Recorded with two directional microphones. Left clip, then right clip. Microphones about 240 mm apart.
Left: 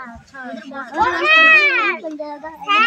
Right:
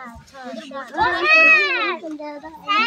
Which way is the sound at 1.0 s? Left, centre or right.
Centre.